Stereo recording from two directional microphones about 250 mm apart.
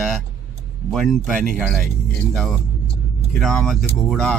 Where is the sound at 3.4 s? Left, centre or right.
Centre.